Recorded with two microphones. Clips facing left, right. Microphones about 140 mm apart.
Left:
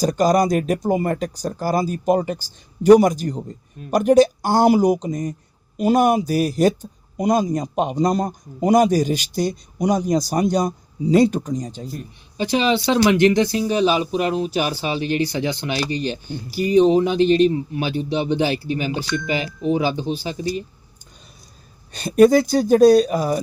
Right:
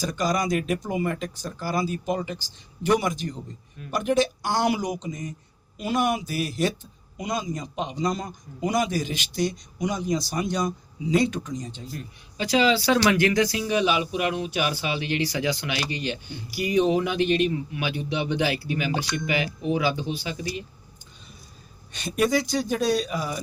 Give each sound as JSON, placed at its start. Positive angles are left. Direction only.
{"t": 0.0, "sound": "speech", "side_deg": 40}
{"t": 11.9, "sound": "speech", "side_deg": 25}
{"t": 21.9, "sound": "speech", "side_deg": 40}